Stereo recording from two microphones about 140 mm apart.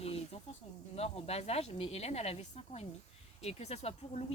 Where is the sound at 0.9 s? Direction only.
45° left (ahead or behind).